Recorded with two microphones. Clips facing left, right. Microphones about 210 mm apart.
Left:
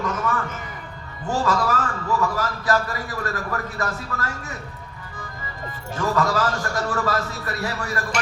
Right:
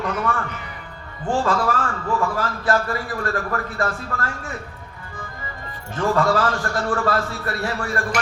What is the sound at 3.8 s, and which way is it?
Speech, 40° left (ahead or behind).